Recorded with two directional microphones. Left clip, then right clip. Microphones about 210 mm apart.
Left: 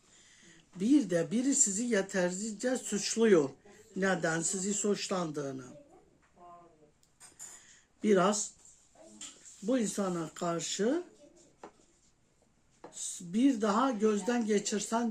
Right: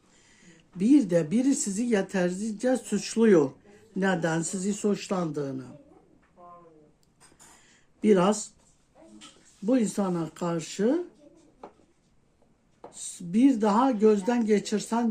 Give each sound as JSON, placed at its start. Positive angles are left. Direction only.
{"t": 0.4, "sound": "a woman's voice", "side_deg": -35}
{"t": 8.0, "sound": "a woman's voice", "side_deg": -35}
{"t": 9.6, "sound": "a woman's voice", "side_deg": -35}
{"t": 12.9, "sound": "a woman's voice", "side_deg": -35}